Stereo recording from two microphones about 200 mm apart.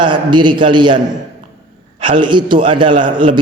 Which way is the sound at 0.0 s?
25° right (ahead or behind).